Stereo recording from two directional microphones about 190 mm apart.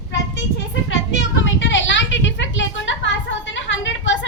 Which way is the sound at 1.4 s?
80° left.